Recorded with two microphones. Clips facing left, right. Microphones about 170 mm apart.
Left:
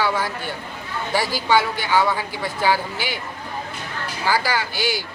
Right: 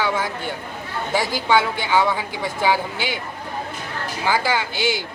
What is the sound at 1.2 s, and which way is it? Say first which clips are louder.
Speech: even; 20° right (ahead or behind).